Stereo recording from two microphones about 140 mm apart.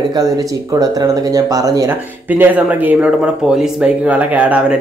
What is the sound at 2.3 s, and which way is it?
Speech, 10° right (ahead or behind).